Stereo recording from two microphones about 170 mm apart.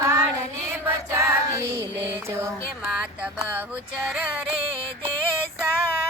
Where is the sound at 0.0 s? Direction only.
15° right (ahead or behind).